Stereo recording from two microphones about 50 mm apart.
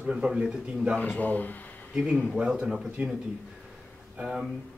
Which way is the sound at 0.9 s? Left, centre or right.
Left.